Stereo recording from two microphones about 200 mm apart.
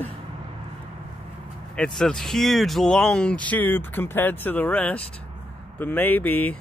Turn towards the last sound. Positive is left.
turn(degrees=10)  # may be behind; listen again after turning